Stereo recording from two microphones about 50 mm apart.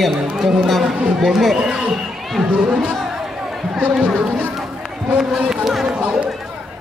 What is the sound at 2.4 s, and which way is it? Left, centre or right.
Speech, right.